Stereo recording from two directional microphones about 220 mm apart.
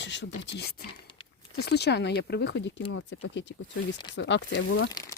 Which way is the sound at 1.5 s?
45° left (ahead or behind).